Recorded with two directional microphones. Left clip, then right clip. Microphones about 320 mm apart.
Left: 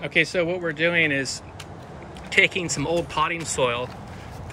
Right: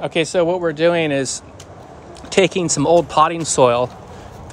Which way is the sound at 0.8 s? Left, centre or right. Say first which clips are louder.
Right 4 dB; centre.